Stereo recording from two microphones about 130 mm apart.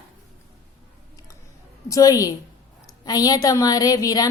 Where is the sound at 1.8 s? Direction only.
25° left (ahead or behind).